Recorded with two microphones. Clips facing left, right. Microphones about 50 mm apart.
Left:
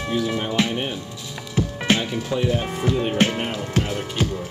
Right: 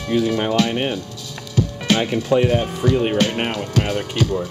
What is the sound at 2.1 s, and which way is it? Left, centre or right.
Speech, right.